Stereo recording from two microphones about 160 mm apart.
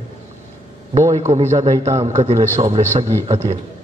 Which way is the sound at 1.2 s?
45° right (ahead or behind).